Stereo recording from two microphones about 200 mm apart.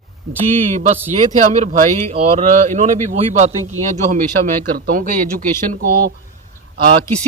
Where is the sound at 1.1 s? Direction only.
35° right (ahead or behind).